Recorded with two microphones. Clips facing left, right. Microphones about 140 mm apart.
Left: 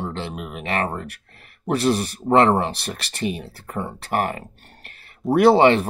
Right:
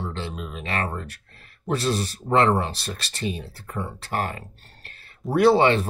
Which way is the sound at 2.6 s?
65° left (ahead or behind).